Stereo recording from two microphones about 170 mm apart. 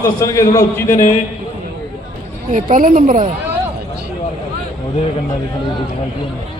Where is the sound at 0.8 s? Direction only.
50° left (ahead or behind).